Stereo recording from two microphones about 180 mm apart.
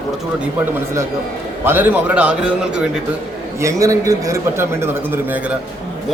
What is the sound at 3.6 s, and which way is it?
A man's voice, 15° right (ahead or behind).